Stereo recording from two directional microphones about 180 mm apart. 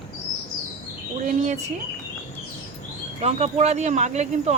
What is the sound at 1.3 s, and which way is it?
Speech, 40° right (ahead or behind).